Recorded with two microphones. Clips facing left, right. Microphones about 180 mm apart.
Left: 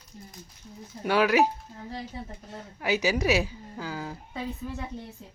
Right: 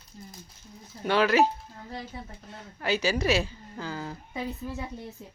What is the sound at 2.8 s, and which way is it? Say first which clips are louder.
Speech: left 1 dB; 15° left (ahead or behind).